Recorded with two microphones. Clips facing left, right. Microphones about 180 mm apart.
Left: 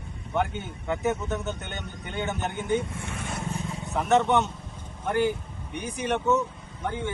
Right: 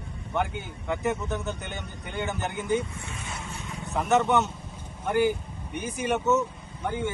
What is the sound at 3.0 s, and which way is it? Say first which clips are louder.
Speech: left 4 dB; 60° left (ahead or behind).